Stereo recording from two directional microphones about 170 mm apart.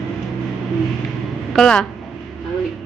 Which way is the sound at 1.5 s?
5° left (ahead or behind).